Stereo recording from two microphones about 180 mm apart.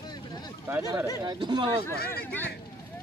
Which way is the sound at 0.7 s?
10° right (ahead or behind).